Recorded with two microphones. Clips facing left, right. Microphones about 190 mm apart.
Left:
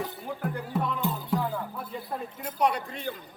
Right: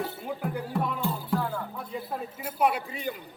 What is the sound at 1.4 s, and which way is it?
Music, 15° left (ahead or behind).